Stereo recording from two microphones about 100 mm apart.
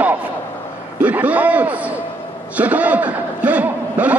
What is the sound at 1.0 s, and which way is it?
A man's voice, 15° right (ahead or behind).